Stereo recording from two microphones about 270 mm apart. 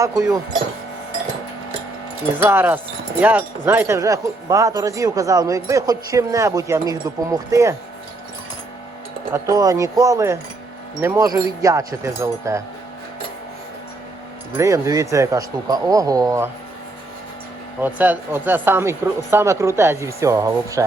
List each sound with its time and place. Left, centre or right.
0.0 s speech: centre
2.4 s speech: centre
9.3 s speech: centre
14.5 s speech: centre
17.7 s speech: centre